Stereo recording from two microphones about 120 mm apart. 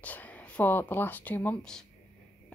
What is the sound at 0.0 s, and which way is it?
Speech, 15° left (ahead or behind).